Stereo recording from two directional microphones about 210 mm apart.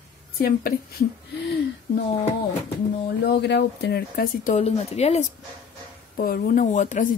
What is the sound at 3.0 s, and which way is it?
Speech, 50° left (ahead or behind).